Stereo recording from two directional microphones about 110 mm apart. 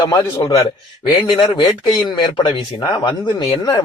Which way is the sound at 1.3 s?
45° left (ahead or behind).